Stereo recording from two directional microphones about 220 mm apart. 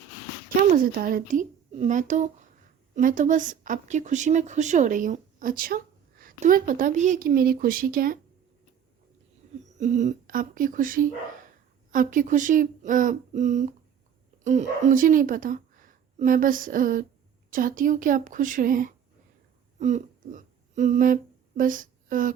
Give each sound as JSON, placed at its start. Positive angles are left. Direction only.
{"t": 0.7, "sound": "speech", "side_deg": -40}
{"t": 9.7, "sound": "speech", "side_deg": -35}